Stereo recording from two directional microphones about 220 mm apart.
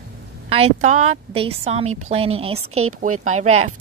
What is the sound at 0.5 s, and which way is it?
A woman's voice, 30° right (ahead or behind).